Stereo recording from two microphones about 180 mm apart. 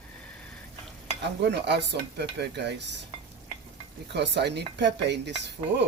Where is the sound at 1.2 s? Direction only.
70° right (ahead or behind).